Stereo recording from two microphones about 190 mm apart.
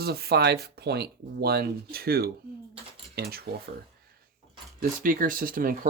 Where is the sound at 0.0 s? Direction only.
55° right (ahead or behind).